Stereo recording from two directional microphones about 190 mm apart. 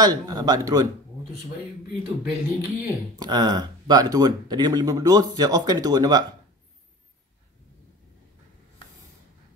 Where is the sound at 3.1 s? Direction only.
20° right (ahead or behind).